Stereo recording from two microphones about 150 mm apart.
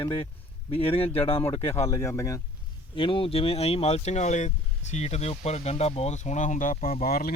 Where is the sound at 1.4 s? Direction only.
20° left (ahead or behind).